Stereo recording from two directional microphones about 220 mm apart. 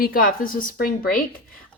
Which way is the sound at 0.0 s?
40° left (ahead or behind).